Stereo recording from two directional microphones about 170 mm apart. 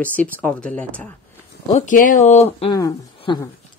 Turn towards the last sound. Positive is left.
turn(degrees=30)  # may be behind; listen again after turning